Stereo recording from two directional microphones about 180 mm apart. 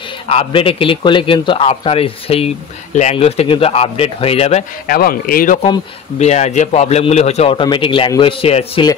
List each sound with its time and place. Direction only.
0.3 s a man's voice: 30° left (ahead or behind)
4.8 s speech: 55° left (ahead or behind)
5.6 s a man's voice: 35° left (ahead or behind)